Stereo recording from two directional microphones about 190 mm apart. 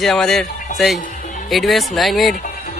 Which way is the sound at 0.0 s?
Centre (ahead or behind).